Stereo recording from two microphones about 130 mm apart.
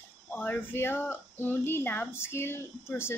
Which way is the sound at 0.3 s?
15° left (ahead or behind).